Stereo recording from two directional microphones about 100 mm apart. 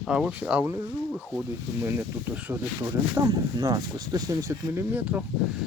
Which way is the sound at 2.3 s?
15° right (ahead or behind).